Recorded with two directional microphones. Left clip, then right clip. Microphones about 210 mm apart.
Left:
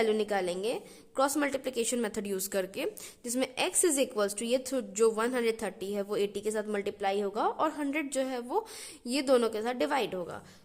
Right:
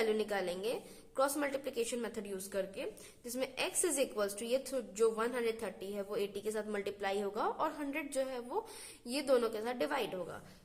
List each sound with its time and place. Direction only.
0.0 s a woman's voice: 30° left (ahead or behind)